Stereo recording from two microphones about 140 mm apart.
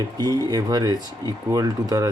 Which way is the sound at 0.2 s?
30° right (ahead or behind).